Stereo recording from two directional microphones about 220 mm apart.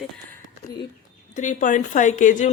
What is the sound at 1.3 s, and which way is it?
A woman's voice, 35° left (ahead or behind).